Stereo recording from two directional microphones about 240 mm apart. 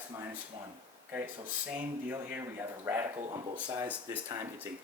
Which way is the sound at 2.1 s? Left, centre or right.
Centre.